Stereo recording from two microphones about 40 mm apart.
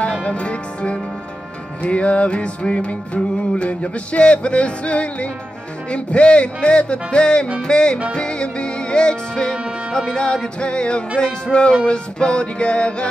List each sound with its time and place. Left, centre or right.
0.1 s music: left
9.6 s music: right
9.9 s music: left